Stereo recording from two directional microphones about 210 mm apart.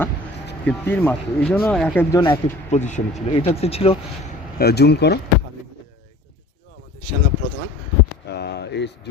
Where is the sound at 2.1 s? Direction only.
25° left (ahead or behind).